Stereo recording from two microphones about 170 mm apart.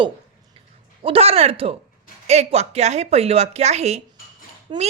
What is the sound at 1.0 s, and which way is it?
Speech, 35° right (ahead or behind).